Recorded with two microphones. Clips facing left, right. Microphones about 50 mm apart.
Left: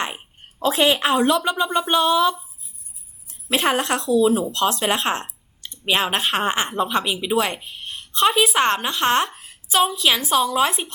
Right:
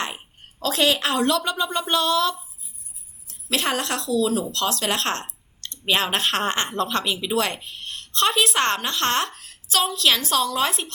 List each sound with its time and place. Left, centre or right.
0.6 s a woman's voice: left